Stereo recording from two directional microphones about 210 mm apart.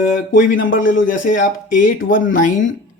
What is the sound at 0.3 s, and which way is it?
Speech, 40° left (ahead or behind).